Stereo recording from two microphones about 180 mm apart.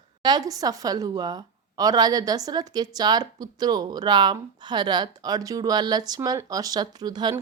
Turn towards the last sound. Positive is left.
turn(degrees=-25)  # may be behind; listen again after turning